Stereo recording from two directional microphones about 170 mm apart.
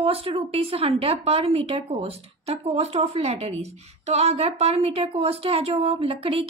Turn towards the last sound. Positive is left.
turn(degrees=-35)  # may be behind; listen again after turning